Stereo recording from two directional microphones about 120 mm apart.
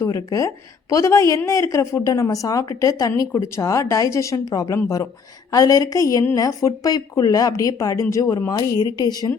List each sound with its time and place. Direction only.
0.0 s a woman's voice: 30° left (ahead or behind)